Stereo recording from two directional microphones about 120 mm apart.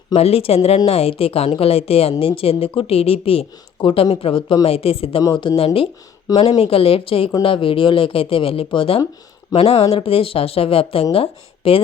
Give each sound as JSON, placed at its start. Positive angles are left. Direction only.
{"t": 0.1, "sound": "a woman's voice", "side_deg": 55}
{"t": 5.4, "sound": "a woman's voice", "side_deg": 40}